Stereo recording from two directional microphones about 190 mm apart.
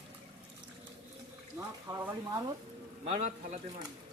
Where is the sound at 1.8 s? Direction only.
15° right (ahead or behind).